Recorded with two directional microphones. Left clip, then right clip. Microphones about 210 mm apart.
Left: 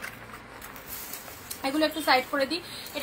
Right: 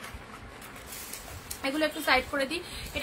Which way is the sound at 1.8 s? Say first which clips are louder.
Left 2 dB; 15° right (ahead or behind).